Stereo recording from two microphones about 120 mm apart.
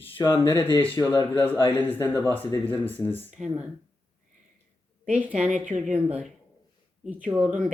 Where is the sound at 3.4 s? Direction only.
5° right (ahead or behind).